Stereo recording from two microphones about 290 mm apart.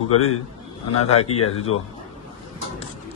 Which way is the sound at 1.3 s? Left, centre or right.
Left.